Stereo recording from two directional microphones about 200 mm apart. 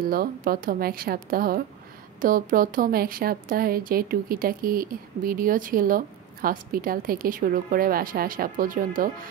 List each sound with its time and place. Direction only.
0.0 s speech: 45° right (ahead or behind)